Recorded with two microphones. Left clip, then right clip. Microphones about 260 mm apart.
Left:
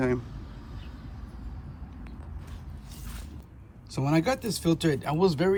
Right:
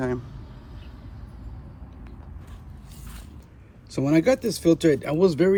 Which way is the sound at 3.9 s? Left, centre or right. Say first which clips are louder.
Right 6 dB; left.